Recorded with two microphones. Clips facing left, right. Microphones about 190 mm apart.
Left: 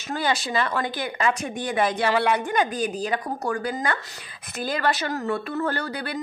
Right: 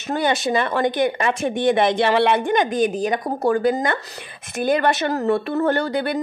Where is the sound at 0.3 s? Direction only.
25° right (ahead or behind).